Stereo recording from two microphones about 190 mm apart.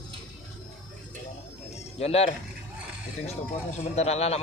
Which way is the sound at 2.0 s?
35° left (ahead or behind).